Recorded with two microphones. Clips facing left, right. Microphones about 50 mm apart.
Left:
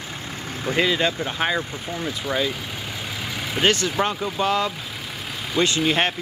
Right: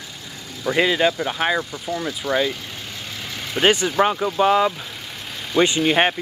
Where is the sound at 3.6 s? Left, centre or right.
Centre.